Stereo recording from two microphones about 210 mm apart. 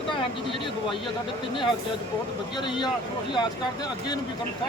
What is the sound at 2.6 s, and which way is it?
Speech, 20° left (ahead or behind).